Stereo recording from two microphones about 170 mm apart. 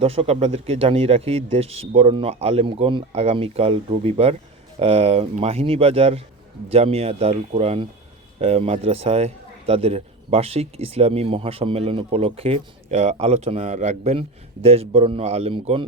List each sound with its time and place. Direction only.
0.0 s a man's voice: 35° right (ahead or behind)